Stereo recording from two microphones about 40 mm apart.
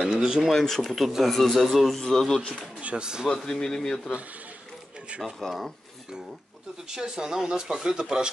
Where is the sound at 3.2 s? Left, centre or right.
Centre.